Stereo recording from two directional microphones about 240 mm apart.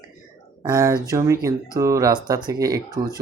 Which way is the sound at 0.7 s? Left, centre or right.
Centre.